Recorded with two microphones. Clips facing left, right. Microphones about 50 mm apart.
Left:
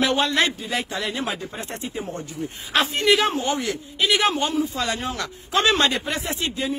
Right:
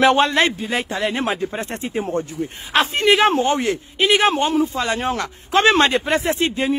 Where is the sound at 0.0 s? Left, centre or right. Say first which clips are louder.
Right 6 dB; right.